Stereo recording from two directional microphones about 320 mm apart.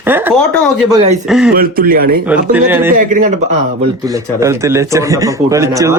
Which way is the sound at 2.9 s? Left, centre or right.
Right.